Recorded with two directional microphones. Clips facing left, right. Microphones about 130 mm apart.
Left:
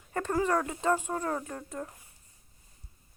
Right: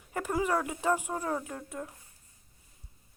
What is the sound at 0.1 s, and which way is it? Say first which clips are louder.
A woman's voice: left 2 dB; 10° right (ahead or behind).